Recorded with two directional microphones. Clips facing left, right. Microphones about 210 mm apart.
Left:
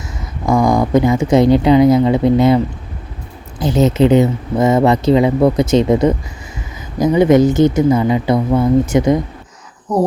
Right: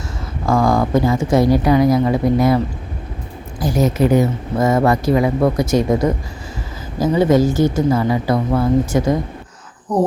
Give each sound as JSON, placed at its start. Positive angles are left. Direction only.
{"t": 0.4, "sound": "speech", "side_deg": 15}
{"t": 3.6, "sound": "speech", "side_deg": 25}
{"t": 9.9, "sound": "speech", "side_deg": 10}